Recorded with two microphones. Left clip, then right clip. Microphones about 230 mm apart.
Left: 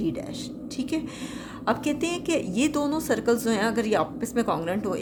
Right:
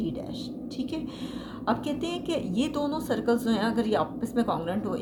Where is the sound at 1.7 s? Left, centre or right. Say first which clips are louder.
Left 3 dB; left.